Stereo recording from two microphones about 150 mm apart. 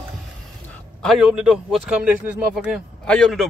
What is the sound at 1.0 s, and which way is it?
A man's voice, centre (ahead or behind).